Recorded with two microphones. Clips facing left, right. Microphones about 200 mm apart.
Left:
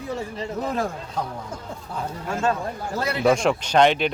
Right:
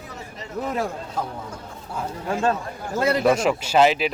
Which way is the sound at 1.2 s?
5° right (ahead or behind).